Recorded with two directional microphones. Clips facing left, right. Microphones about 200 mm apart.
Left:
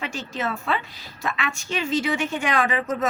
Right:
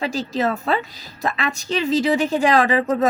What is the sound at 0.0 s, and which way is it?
A woman's voice, 35° right (ahead or behind).